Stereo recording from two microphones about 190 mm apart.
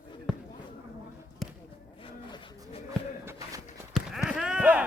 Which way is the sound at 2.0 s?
25° left (ahead or behind).